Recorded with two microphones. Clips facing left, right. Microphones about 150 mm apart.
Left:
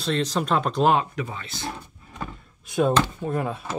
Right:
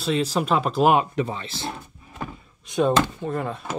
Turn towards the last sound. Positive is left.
turn(degrees=5)  # may be behind; listen again after turning